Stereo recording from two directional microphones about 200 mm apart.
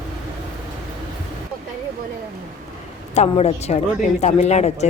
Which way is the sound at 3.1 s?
35° left (ahead or behind).